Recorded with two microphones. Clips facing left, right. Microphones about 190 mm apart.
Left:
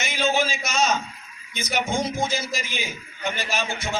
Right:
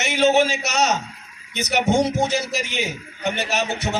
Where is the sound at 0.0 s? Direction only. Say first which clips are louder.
Right 6 dB; 70° right (ahead or behind).